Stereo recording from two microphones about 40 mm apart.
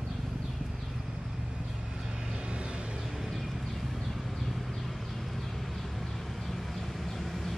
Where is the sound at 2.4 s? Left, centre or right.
Right.